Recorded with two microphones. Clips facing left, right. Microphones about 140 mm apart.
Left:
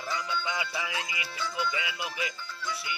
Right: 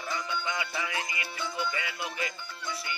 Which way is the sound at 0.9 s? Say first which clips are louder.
Even; 25° right (ahead or behind).